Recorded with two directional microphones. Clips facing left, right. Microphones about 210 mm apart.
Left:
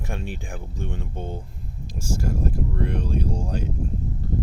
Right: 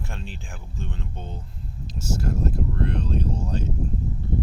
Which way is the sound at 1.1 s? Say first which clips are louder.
Left 5 dB; 50° left (ahead or behind).